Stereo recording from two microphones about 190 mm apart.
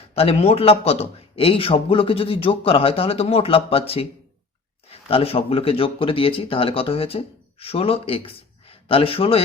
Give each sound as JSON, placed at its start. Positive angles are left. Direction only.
{"t": 0.1, "sound": "a man's voice", "side_deg": 30}